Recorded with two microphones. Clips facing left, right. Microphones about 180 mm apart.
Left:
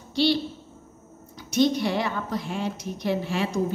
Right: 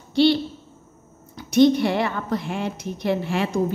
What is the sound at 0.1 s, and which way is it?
Speech, 55° right (ahead or behind).